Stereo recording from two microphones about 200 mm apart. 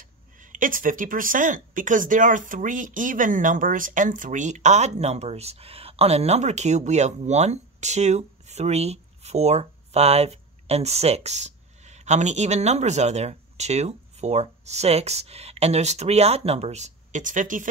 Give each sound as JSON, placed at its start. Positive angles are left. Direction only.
{"t": 0.0, "sound": "speech", "side_deg": -40}